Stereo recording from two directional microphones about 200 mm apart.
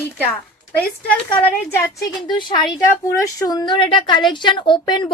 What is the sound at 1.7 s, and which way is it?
A woman's voice, 15° left (ahead or behind).